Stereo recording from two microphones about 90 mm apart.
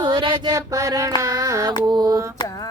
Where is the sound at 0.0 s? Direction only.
65° right (ahead or behind).